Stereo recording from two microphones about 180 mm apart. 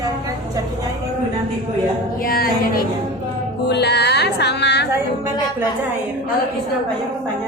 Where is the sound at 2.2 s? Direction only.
55° left (ahead or behind).